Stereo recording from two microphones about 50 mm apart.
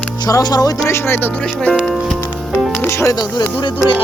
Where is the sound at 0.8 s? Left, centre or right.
Left.